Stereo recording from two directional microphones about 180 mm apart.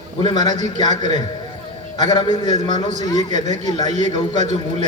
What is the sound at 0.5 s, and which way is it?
Speech, 40° right (ahead or behind).